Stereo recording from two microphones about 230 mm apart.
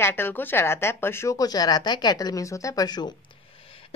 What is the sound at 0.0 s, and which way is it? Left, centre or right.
Speech, centre.